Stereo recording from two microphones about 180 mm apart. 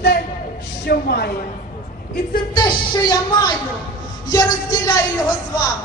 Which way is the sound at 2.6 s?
20° left (ahead or behind).